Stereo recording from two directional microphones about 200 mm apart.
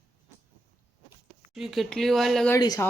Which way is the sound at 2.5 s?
15° left (ahead or behind).